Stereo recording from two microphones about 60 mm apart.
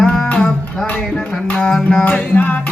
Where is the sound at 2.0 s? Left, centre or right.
Left.